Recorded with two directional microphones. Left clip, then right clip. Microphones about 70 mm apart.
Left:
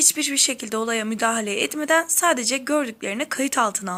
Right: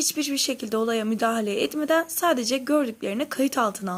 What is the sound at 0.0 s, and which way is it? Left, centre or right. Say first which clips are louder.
A woman's voice: left 4 dB; centre.